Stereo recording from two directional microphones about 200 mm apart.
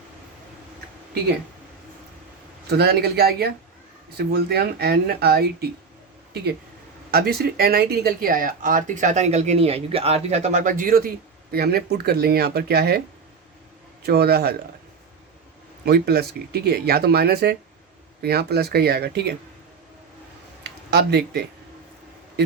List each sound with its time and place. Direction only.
2.6 s speech: 50° right (ahead or behind)
14.0 s speech: 50° right (ahead or behind)
15.8 s speech: 55° right (ahead or behind)
20.7 s speech: 55° right (ahead or behind)